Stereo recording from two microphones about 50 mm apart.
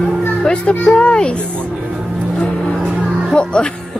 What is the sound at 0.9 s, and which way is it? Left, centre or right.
Speech, centre.